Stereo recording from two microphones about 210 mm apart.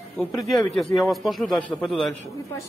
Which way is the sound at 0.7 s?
Centre (ahead or behind).